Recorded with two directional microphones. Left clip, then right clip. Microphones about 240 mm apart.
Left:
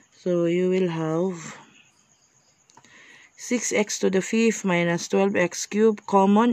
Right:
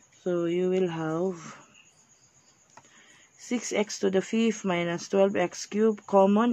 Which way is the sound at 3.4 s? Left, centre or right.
Left.